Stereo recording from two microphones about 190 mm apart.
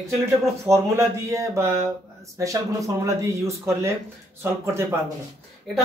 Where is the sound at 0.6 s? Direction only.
15° right (ahead or behind).